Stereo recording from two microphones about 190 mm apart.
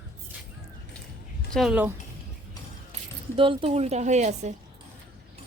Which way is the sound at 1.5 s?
5° right (ahead or behind).